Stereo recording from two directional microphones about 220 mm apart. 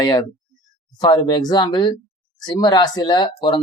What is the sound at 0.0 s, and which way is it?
Speech, 20° left (ahead or behind).